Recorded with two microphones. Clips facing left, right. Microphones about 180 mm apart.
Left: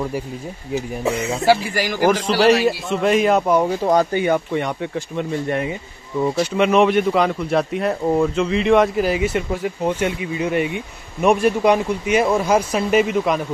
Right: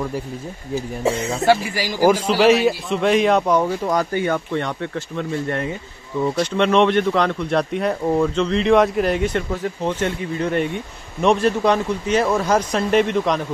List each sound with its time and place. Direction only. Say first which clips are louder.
1.3 s a man's voice: left 1 dB; 5° left (ahead or behind)
2.0 s speech: right 2 dB; 10° right (ahead or behind)
3.8 s a man's voice: left 3 dB; 25° left (ahead or behind); by 13.4 s 5° left (ahead or behind)